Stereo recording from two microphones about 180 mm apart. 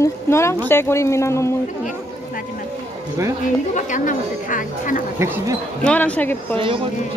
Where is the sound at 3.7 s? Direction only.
45° left (ahead or behind).